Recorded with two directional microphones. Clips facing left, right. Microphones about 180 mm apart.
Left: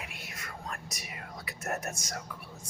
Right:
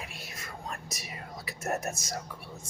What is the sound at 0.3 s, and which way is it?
Whispering, 25° right (ahead or behind).